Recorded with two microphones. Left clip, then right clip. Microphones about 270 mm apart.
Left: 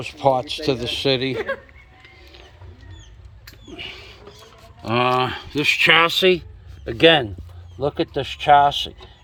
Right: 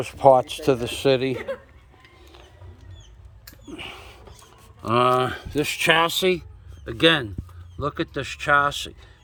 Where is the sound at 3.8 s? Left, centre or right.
Centre.